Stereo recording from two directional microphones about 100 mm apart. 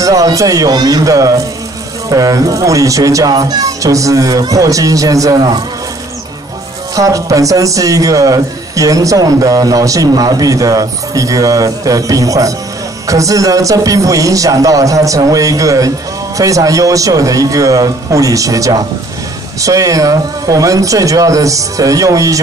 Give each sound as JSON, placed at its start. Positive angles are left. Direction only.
{"t": 0.0, "sound": "a man's voice", "side_deg": -35}
{"t": 7.0, "sound": "a man's voice", "side_deg": -35}